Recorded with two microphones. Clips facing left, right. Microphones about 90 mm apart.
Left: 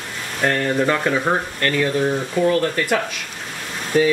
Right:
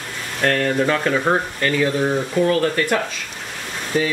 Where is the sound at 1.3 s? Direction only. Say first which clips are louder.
Right 1 dB; 5° right (ahead or behind).